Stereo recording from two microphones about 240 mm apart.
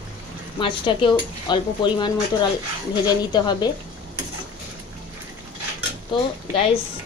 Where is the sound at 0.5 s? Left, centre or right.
Centre.